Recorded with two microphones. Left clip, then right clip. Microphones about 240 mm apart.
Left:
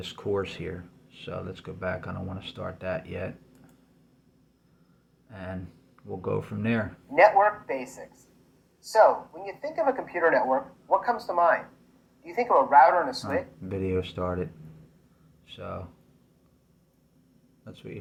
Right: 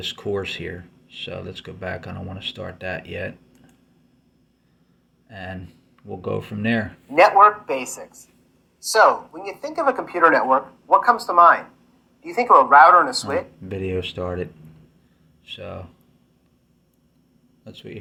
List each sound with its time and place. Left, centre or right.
0.0 s speech: centre
6.2 s speech: centre
7.1 s speech: right
8.9 s speech: right
14.0 s speech: centre
15.5 s speech: centre